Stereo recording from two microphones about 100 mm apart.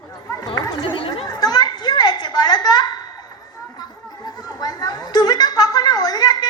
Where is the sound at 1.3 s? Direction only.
40° left (ahead or behind).